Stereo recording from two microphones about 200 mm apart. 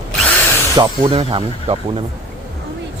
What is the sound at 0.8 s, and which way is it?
Speech, 25° right (ahead or behind).